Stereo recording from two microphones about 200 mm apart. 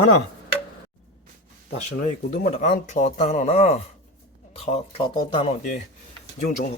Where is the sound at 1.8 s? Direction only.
35° left (ahead or behind).